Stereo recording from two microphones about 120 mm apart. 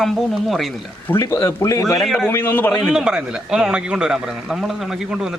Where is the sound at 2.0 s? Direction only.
Centre (ahead or behind).